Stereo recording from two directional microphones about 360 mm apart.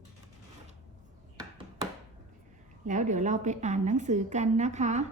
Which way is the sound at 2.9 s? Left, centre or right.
Centre.